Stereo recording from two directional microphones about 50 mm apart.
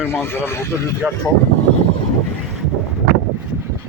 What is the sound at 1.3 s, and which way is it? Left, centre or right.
Speech, left.